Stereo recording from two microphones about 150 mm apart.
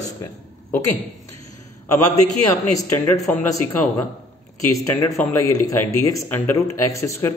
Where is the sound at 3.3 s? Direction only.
10° left (ahead or behind).